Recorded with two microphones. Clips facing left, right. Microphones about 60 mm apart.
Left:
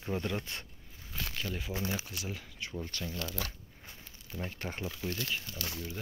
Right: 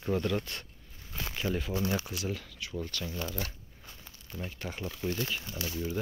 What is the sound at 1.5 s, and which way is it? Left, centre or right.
Speech, centre.